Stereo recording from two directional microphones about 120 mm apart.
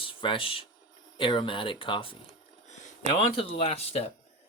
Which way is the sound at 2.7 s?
70° left (ahead or behind).